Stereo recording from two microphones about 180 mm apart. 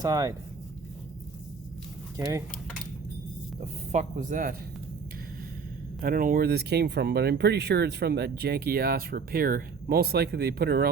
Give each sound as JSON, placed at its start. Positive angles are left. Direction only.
{"t": 0.0, "sound": "speech", "side_deg": -20}
{"t": 2.1, "sound": "speech", "side_deg": -20}
{"t": 3.9, "sound": "speech", "side_deg": -45}
{"t": 6.0, "sound": "speech", "side_deg": -50}